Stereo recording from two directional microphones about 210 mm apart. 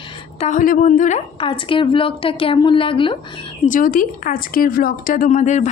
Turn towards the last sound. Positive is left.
turn(degrees=35)  # may be behind; listen again after turning